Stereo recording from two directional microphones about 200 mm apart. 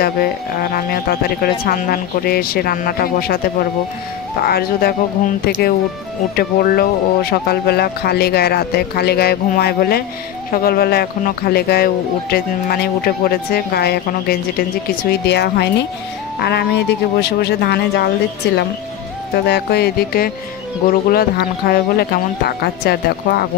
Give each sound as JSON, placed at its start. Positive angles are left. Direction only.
{"t": 0.7, "sound": "speech", "side_deg": 50}
{"t": 4.4, "sound": "speech", "side_deg": 50}